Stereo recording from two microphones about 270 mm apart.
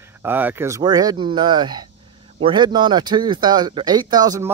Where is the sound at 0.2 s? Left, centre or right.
Centre.